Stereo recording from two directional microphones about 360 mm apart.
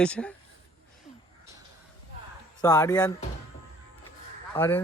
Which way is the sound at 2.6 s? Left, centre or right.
Centre.